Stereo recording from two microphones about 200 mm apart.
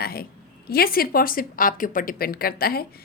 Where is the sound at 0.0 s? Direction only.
50° left (ahead or behind).